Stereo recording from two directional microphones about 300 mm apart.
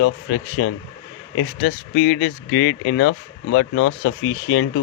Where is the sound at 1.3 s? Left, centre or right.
Left.